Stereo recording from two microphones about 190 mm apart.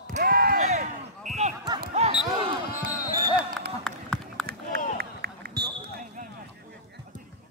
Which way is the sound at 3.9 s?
5° left (ahead or behind).